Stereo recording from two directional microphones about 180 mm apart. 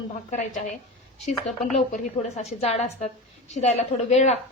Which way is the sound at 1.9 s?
35° left (ahead or behind).